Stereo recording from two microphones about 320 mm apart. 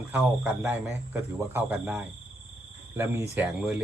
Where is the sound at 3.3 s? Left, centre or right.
Centre.